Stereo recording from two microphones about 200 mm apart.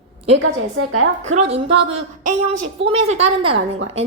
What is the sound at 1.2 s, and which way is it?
Speech, 35° right (ahead or behind).